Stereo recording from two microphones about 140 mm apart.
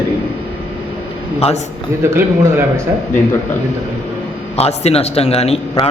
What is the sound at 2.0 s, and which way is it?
Speech, 20° right (ahead or behind).